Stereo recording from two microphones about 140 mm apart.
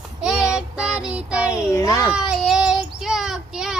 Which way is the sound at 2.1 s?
5° right (ahead or behind).